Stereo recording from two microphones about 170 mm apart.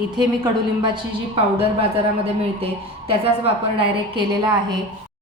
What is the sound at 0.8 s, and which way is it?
Speech, 25° right (ahead or behind).